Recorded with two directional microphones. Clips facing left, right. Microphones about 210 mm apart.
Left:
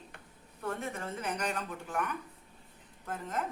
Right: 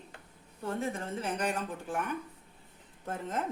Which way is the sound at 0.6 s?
30° right (ahead or behind).